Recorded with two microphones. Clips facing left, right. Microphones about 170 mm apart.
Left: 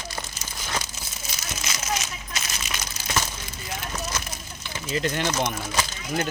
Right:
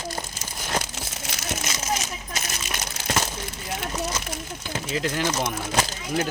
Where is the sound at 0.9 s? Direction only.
80° right; by 1.7 s 60° right (ahead or behind).